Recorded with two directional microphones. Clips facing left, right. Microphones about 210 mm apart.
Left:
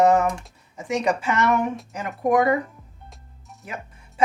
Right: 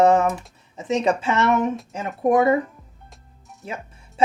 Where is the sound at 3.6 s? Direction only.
25° right (ahead or behind).